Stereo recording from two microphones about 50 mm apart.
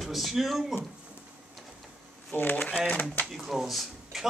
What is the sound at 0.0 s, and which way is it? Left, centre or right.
Speech, centre.